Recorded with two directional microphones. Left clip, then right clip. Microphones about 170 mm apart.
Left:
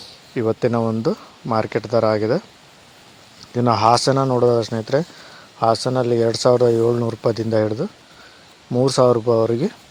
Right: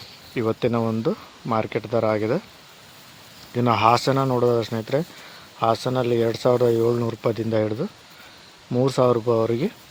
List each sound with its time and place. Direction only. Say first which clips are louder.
0.3 s speech: left 3 dB; 20° left (ahead or behind)
3.5 s speech: left 3 dB; 25° left (ahead or behind)